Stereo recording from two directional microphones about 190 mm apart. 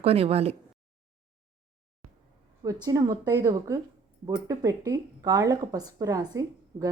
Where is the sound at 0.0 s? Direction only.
30° right (ahead or behind).